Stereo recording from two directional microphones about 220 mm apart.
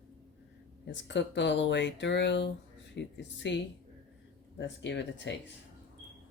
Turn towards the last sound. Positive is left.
turn(degrees=55)  # may be behind; listen again after turning